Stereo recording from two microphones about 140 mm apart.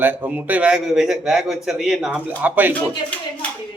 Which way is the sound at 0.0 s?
10° right (ahead or behind).